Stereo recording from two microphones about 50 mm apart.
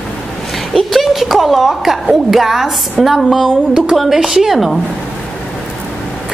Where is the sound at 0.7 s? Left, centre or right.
Centre.